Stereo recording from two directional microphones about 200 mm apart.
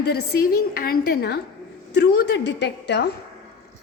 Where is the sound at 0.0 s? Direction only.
55° left (ahead or behind).